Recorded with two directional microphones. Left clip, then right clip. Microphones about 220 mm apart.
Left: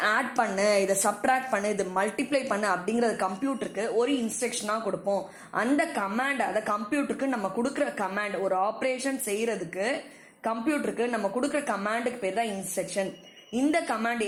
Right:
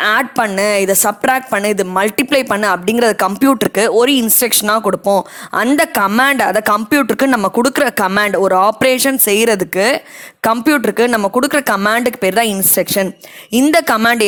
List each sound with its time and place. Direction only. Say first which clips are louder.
0.0 s a woman's voice: right 12 dB; 35° right (ahead or behind)